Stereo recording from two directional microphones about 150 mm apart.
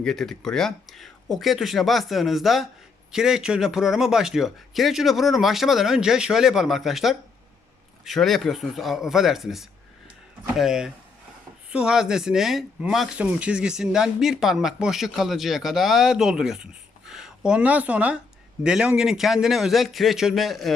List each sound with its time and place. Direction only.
0.0 s speech: 5° left (ahead or behind)